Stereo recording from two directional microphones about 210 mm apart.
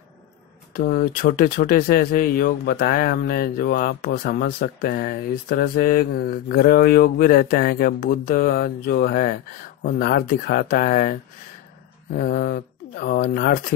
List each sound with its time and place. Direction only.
0.7 s speech: 40° left (ahead or behind)